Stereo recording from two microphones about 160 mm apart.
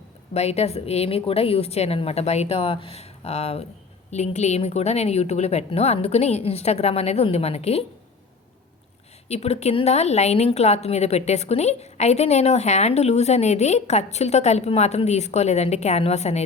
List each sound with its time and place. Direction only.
0.3 s a woman's voice: 40° left (ahead or behind)
9.3 s speech: 40° left (ahead or behind)